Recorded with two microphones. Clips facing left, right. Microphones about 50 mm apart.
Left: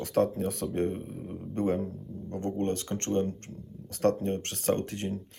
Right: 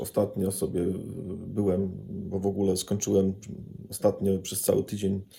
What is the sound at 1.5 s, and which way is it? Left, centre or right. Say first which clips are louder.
Speech: right 2 dB; left.